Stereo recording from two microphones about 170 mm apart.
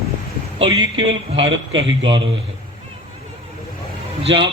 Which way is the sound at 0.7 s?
25° right (ahead or behind).